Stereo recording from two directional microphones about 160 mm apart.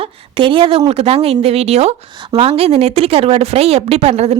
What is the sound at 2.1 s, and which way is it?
A woman's voice, 30° right (ahead or behind).